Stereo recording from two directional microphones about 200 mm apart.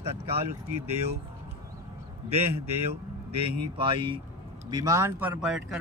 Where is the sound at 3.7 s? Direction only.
25° right (ahead or behind).